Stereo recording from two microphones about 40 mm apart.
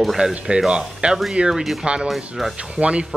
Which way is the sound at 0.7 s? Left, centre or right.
Right.